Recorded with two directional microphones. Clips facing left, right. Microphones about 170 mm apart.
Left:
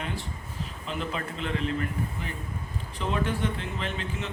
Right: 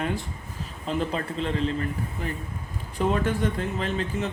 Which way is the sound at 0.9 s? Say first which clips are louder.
Right 6 dB; 40° right (ahead or behind).